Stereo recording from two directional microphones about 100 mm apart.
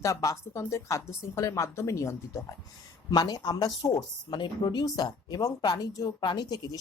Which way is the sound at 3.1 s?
40° left (ahead or behind).